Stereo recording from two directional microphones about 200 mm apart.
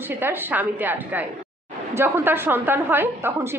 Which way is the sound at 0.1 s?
10° right (ahead or behind).